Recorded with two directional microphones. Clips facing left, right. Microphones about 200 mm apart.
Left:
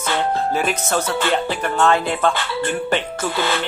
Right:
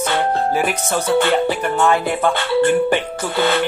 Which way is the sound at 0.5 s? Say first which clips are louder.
Right 1 dB; 10° right (ahead or behind).